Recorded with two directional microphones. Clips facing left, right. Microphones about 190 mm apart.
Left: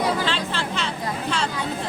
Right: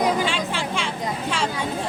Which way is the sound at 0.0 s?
10° right (ahead or behind).